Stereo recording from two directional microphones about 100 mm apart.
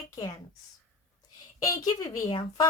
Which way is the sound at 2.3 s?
55° left (ahead or behind).